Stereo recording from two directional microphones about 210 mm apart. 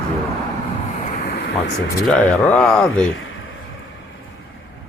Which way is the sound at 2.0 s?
5° left (ahead or behind).